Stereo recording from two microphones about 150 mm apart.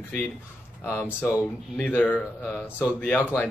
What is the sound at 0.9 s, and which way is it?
Speech, 15° left (ahead or behind).